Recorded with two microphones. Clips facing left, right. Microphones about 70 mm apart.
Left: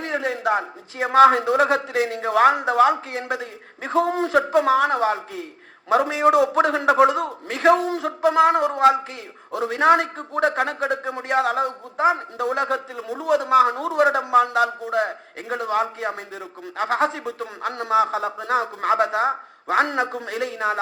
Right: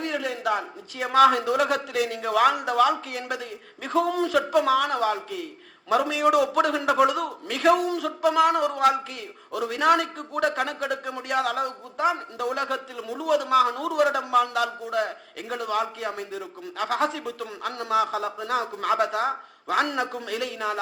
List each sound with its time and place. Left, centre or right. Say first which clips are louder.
0.0 s a man's voice: left 4 dB; left